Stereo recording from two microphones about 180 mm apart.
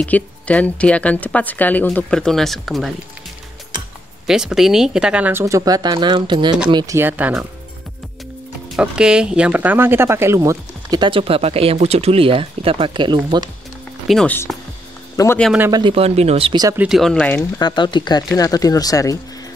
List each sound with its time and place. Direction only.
0.0 s speech: 5° left (ahead or behind)
4.3 s speech: centre (ahead or behind)
8.6 s speech: 5° right (ahead or behind); by 13.5 s 25° right (ahead or behind)
14.0 s speech: 5° left (ahead or behind)
15.7 s speech: 30° right (ahead or behind)
16.6 s speech: 10° right (ahead or behind); by 17.5 s 10° left (ahead or behind)
17.6 s speech: 25° left (ahead or behind)